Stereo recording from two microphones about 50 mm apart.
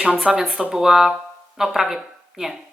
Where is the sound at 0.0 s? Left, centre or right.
Centre.